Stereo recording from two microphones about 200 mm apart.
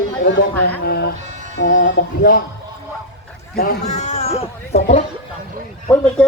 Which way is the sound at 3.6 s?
40° left (ahead or behind).